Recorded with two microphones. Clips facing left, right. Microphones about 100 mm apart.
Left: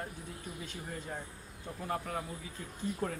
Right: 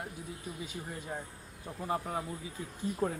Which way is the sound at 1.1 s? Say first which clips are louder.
Right 2 dB; 15° right (ahead or behind).